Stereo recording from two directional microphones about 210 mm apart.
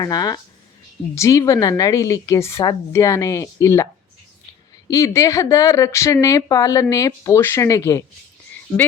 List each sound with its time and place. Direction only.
0.0 s a woman's voice: 20° left (ahead or behind)
4.9 s a woman's voice: 15° left (ahead or behind)